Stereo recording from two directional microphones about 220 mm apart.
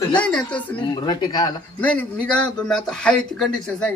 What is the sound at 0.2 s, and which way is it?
Speech, 5° left (ahead or behind).